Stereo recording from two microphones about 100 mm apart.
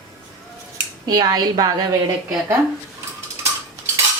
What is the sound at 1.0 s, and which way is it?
Speech, 40° right (ahead or behind).